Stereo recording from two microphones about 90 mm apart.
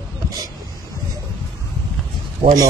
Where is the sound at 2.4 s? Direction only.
55° right (ahead or behind).